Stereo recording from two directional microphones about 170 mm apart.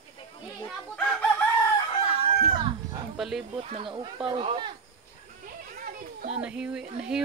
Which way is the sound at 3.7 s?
30° right (ahead or behind).